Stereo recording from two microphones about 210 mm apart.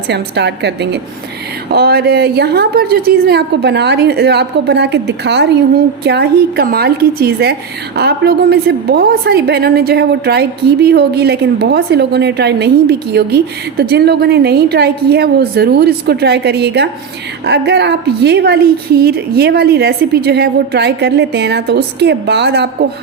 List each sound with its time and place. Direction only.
0.1 s a woman's voice: 55° right (ahead or behind)